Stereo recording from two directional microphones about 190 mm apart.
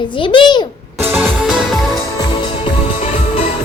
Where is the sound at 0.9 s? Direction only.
10° right (ahead or behind).